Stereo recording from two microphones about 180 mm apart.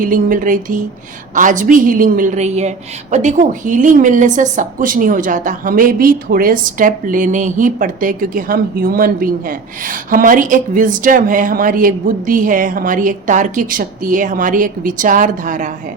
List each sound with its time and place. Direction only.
0.0 s a woman's voice: 50° right (ahead or behind)